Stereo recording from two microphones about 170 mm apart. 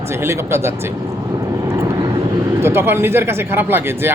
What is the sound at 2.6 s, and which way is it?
Speech, 15° right (ahead or behind).